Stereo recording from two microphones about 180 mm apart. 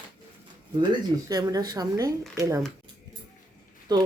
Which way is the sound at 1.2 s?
20° right (ahead or behind).